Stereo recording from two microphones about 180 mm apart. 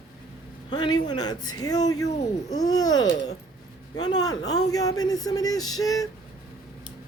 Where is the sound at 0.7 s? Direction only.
25° left (ahead or behind).